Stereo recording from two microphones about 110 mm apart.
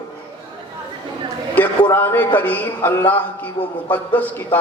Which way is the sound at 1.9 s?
20° left (ahead or behind).